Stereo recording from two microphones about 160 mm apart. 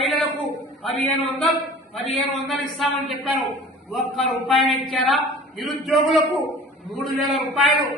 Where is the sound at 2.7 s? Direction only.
Centre (ahead or behind).